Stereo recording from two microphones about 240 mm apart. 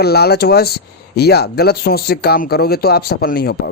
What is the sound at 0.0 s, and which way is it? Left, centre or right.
Speech, left.